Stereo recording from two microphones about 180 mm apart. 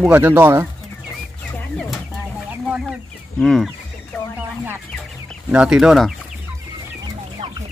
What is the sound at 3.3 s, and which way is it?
Speech, 5° left (ahead or behind).